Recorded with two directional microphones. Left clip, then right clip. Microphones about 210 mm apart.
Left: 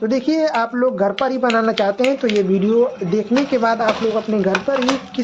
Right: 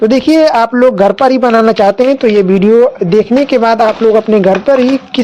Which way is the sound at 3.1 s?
40° right (ahead or behind).